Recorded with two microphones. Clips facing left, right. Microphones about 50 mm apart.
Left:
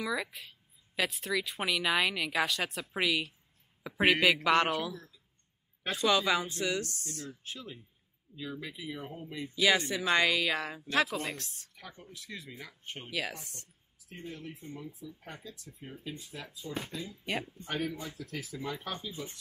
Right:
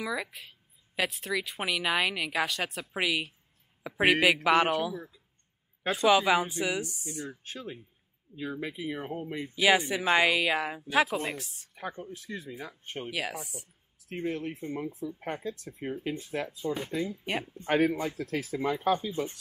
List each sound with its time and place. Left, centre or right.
0.0 s a woman's voice: centre
7.5 s speech: right
9.6 s a woman's voice: centre
11.7 s speech: right
13.2 s a woman's voice: centre
14.0 s speech: right